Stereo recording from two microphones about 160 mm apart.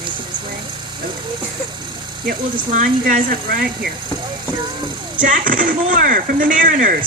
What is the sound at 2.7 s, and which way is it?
Speech, 60° right (ahead or behind).